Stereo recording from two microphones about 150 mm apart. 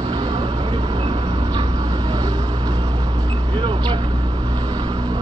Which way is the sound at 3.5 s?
35° right (ahead or behind).